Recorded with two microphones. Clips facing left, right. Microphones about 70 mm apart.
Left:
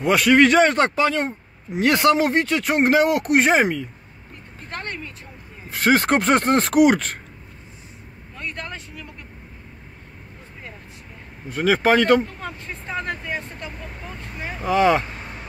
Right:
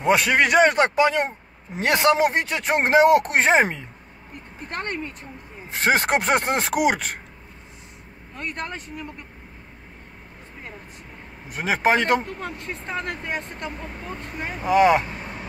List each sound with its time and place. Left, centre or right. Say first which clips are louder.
0.0 s speech: left 3 dB; right; by 7.2 s centre
8.4 s speech: right 1 dB; right
11.4 s speech: left 3 dB; right
12.5 s speech: even; right
14.6 s speech: right 1 dB; right